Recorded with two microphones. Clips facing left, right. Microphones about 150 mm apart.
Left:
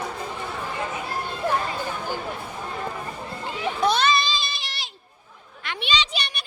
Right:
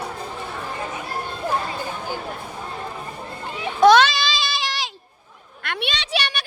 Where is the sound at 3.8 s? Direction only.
90° right.